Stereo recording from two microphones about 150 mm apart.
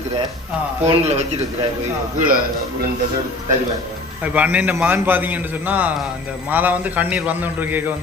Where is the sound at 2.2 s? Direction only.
70° right (ahead or behind).